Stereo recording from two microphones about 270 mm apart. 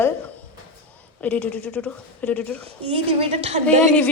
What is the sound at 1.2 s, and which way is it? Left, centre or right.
Speech, centre.